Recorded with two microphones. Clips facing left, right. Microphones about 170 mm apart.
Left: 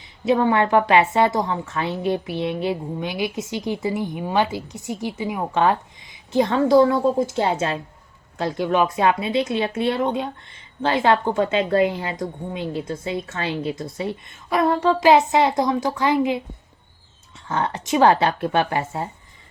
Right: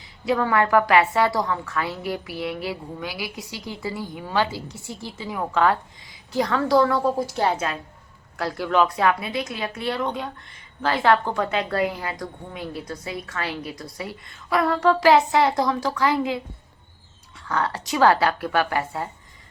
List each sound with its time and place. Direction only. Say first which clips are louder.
0.0 s speech: left 4 dB; 25° left (ahead or behind)